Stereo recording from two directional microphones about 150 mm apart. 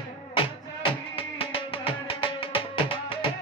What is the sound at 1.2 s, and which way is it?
Music, 40° left (ahead or behind).